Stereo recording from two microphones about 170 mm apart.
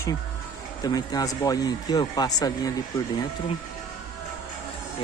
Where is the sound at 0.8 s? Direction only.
20° left (ahead or behind).